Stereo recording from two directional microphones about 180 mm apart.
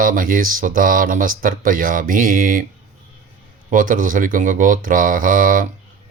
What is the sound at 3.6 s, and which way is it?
Speech, 50° right (ahead or behind).